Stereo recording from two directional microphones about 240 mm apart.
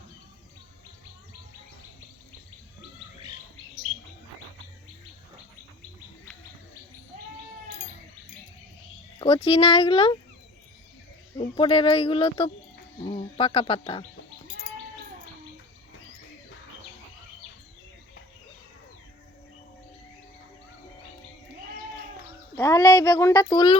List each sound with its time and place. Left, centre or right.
9.1 s speech: left
11.3 s speech: left
22.5 s speech: centre